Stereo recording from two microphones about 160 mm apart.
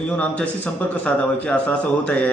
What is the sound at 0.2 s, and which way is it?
A man's voice, 10° left (ahead or behind).